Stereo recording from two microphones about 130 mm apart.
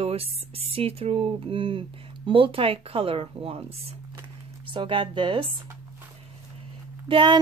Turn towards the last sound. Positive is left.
turn(degrees=-40)  # may be behind; listen again after turning